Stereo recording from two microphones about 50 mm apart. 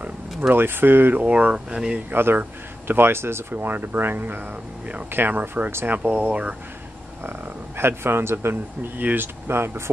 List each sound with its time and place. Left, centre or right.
0.6 s speech: right
1.1 s speech: right
2.1 s speech: right
3.5 s speech: right
5.9 s speech: right
7.2 s speech: right
8.9 s speech: right